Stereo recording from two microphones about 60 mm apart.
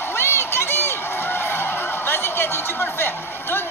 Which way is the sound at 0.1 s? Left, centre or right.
Left.